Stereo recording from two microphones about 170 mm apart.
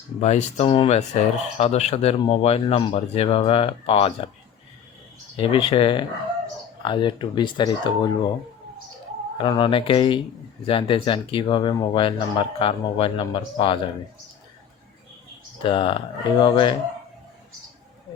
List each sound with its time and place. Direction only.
0.2 s speech: 45° left (ahead or behind)
5.4 s speech: 30° left (ahead or behind)
9.4 s speech: 30° left (ahead or behind)
15.6 s speech: 30° left (ahead or behind)